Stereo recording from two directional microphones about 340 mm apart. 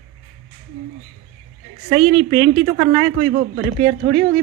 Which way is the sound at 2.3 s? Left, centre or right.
Centre.